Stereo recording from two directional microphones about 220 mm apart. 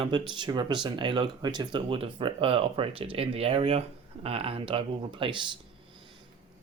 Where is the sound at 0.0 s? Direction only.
20° right (ahead or behind).